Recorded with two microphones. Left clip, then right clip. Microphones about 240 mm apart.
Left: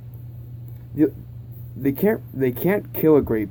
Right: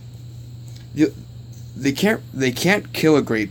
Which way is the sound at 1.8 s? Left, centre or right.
Right.